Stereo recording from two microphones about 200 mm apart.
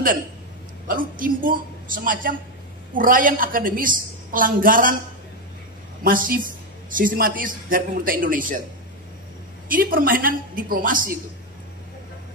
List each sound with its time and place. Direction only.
0.8 s a woman's voice: 45° right (ahead or behind)
6.0 s a woman's voice: 45° right (ahead or behind)
9.7 s a woman's voice: 45° right (ahead or behind)